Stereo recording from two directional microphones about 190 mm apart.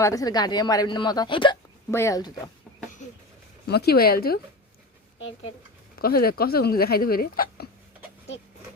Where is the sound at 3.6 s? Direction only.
60° left (ahead or behind).